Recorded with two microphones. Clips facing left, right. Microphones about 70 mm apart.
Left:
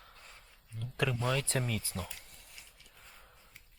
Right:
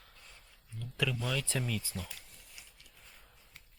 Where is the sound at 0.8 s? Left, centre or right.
Left.